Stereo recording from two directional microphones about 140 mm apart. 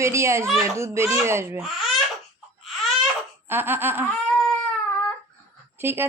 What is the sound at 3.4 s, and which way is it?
Laughter, 15° right (ahead or behind).